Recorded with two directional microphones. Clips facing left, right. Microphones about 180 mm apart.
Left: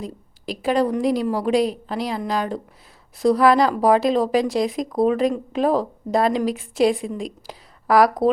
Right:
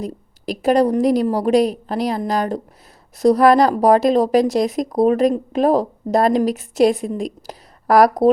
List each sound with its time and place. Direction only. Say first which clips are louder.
0.0 s speech: right 5 dB; 45° right (ahead or behind)